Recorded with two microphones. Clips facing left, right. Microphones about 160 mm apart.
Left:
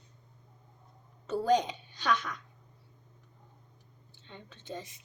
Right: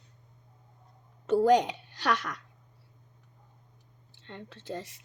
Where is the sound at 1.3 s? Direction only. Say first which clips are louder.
Right 5 dB; 85° right.